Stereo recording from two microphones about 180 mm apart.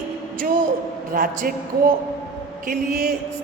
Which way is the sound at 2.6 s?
55° right (ahead or behind).